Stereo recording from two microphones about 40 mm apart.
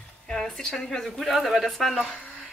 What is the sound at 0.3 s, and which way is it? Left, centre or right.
A woman's voice, centre.